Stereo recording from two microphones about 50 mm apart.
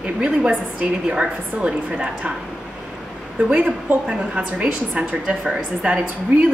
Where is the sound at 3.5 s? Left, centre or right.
Right.